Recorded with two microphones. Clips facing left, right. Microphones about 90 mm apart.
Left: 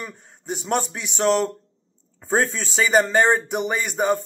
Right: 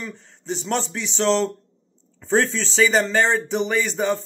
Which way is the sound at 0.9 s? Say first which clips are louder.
Right 1 dB; 10° left (ahead or behind).